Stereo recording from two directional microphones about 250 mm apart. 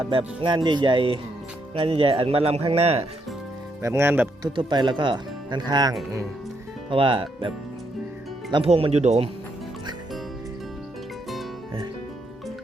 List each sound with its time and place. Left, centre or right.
0.0 s speech: right
3.8 s speech: centre
8.5 s speech: right